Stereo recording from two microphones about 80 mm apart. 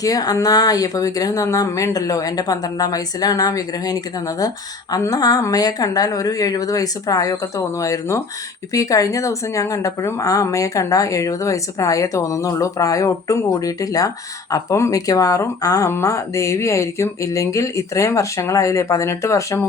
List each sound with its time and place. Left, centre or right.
0.0 s speech: left
15.9 s speech: left